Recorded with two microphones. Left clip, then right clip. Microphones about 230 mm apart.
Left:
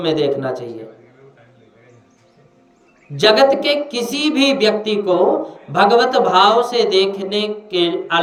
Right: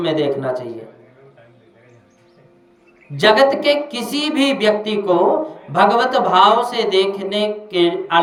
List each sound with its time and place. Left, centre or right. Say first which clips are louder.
0.0 s speech: left 1 dB; centre
3.2 s speech: left 1 dB; centre